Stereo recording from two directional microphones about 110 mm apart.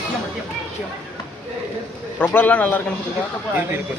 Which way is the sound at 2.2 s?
15° left (ahead or behind).